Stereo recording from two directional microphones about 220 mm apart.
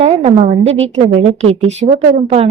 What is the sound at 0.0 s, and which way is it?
A woman's voice, 30° right (ahead or behind).